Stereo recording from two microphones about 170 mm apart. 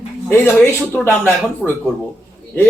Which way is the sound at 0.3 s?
15° left (ahead or behind).